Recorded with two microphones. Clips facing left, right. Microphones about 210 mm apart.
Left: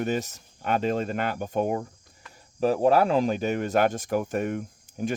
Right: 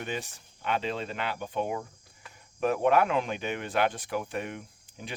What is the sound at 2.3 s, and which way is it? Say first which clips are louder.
Speech: left 4 dB; 35° left (ahead or behind).